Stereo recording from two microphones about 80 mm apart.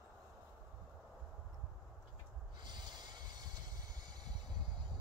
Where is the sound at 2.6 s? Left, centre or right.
Right.